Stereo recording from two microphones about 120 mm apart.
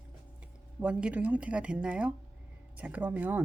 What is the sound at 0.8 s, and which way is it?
Speech, 10° right (ahead or behind).